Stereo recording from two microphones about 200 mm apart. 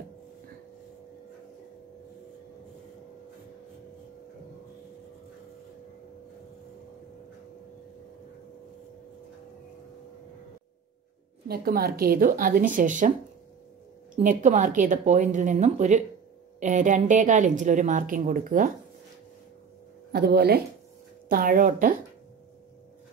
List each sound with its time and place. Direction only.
11.4 s a woman's voice: 50° right (ahead or behind)
14.1 s a woman's voice: 40° right (ahead or behind)
20.1 s a woman's voice: 50° right (ahead or behind)